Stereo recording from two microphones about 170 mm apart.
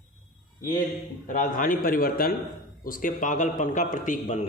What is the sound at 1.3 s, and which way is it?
A man's voice, 50° left (ahead or behind).